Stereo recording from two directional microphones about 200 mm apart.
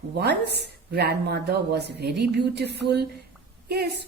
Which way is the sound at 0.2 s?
55° right (ahead or behind).